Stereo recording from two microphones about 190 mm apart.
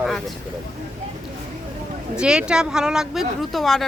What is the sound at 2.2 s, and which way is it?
Speech, 5° right (ahead or behind).